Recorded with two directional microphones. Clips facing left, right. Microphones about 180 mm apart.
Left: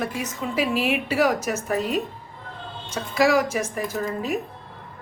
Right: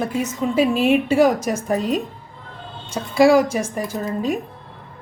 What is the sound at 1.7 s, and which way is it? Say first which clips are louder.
Speech: right 4 dB; 5° left (ahead or behind).